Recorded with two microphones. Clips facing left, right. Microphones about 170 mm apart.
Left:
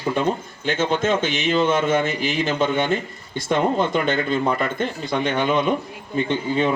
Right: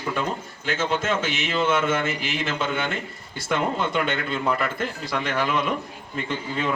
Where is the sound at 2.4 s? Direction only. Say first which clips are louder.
Left 6 dB; 35° left (ahead or behind).